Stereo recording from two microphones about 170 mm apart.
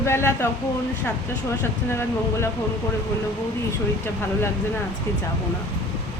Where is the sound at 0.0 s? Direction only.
15° left (ahead or behind).